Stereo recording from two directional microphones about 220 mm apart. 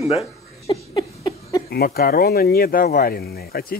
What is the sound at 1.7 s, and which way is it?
Speech, 45° left (ahead or behind).